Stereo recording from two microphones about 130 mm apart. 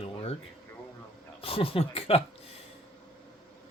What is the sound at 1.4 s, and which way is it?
Speech, 45° left (ahead or behind).